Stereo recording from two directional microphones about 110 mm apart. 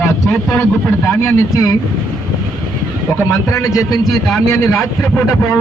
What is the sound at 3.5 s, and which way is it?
Speech, 30° left (ahead or behind).